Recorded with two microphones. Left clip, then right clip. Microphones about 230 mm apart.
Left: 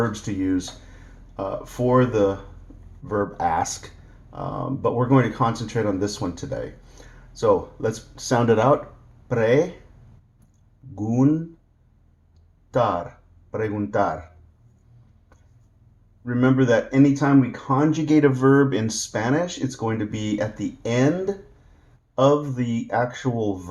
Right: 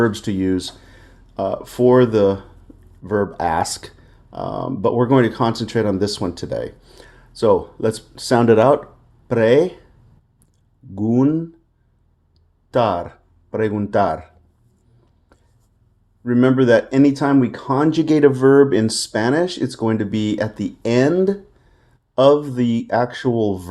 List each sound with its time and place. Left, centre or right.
0.0 s speech: right
10.9 s speech: right
12.7 s speech: right
16.2 s speech: right